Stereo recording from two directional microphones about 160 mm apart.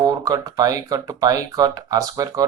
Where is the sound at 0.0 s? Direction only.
20° right (ahead or behind).